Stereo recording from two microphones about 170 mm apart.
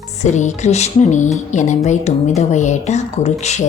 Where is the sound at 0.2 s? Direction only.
45° left (ahead or behind).